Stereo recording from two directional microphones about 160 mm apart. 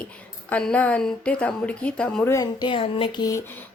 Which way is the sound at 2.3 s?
25° left (ahead or behind).